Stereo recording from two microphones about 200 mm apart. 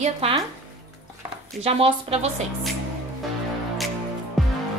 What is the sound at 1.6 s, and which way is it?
Speech, 30° right (ahead or behind).